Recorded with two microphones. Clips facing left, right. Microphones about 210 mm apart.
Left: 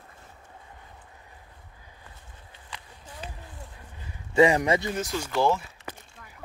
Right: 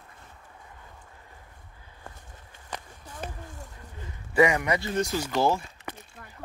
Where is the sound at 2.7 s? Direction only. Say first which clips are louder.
Right 5 dB; 45° right (ahead or behind).